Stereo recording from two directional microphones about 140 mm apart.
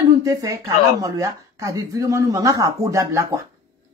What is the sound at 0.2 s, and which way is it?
Speech, 25° right (ahead or behind).